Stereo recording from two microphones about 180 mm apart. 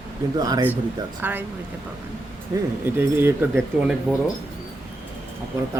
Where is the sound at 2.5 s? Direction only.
20° right (ahead or behind).